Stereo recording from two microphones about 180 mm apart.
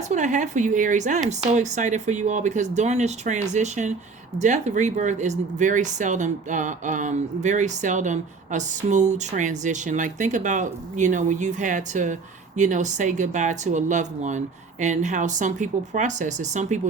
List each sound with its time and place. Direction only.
0.1 s speech: 40° right (ahead or behind)